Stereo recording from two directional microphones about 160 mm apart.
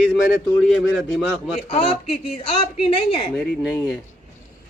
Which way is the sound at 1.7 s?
35° left (ahead or behind).